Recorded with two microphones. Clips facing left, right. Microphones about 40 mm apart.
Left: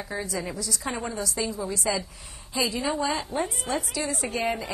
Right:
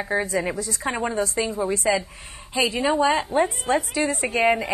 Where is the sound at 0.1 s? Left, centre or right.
Right.